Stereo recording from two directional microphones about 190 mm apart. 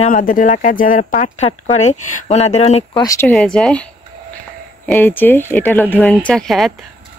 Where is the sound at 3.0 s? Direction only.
15° left (ahead or behind).